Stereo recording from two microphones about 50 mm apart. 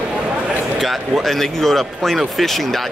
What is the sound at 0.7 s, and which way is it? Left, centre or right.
Speech, centre.